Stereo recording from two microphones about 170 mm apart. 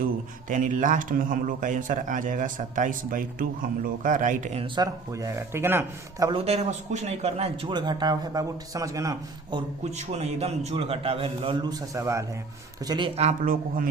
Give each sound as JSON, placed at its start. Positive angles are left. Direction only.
{"t": 0.4, "sound": "speech", "side_deg": -50}
{"t": 4.6, "sound": "speech", "side_deg": -25}
{"t": 6.3, "sound": "speech", "side_deg": -35}
{"t": 9.8, "sound": "a man's voice", "side_deg": -40}
{"t": 13.4, "sound": "speech", "side_deg": -55}